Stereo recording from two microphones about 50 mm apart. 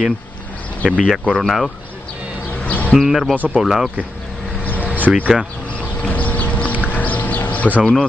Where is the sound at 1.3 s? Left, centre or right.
Centre.